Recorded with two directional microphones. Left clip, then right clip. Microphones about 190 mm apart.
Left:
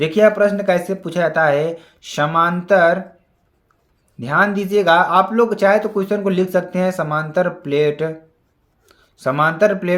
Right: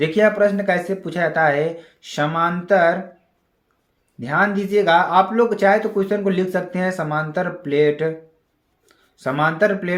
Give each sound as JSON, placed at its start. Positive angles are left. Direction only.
{"t": 0.0, "sound": "speech", "side_deg": 30}
{"t": 4.2, "sound": "speech", "side_deg": 35}